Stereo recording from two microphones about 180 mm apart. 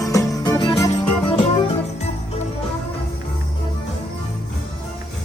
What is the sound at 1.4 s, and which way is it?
Music, 35° left (ahead or behind).